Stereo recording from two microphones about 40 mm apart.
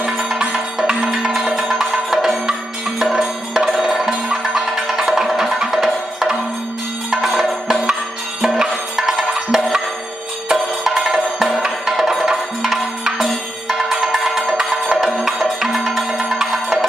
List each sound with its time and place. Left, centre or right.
0.5 s music: centre
3.7 s music: centre
7.1 s music: centre
8.5 s music: centre